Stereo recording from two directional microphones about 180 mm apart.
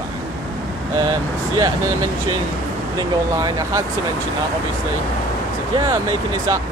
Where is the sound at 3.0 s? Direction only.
20° right (ahead or behind).